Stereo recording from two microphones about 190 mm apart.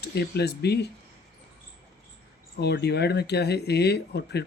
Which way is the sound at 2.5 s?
60° left (ahead or behind).